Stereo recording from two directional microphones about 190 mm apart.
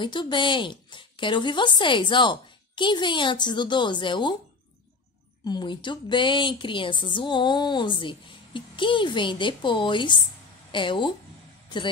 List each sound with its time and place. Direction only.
0.0 s a woman's voice: 25° left (ahead or behind)
5.4 s a woman's voice: 20° left (ahead or behind)